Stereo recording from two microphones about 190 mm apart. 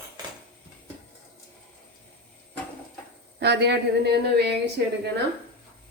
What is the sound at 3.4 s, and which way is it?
Speech, 60° right (ahead or behind).